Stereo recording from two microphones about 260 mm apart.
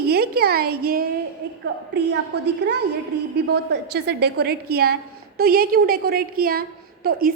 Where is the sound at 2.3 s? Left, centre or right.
Right.